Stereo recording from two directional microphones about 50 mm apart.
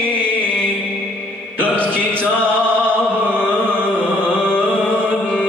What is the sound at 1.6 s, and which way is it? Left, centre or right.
Music, left.